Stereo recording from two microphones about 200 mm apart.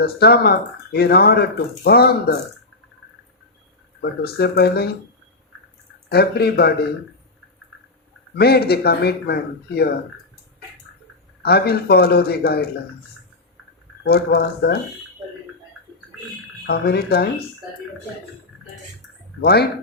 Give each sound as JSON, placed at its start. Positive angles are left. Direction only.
{"t": 0.0, "sound": "speech", "side_deg": 50}
{"t": 4.0, "sound": "speech", "side_deg": 55}
{"t": 6.1, "sound": "speech", "side_deg": 55}
{"t": 8.4, "sound": "speech", "side_deg": 55}
{"t": 11.4, "sound": "speech", "side_deg": 50}
{"t": 14.0, "sound": "speech", "side_deg": 55}
{"t": 16.6, "sound": "speech", "side_deg": 55}
{"t": 19.4, "sound": "speech", "side_deg": 50}